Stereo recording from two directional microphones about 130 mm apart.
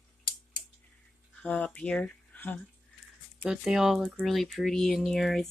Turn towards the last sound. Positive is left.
turn(degrees=0)  # may be behind; listen again after turning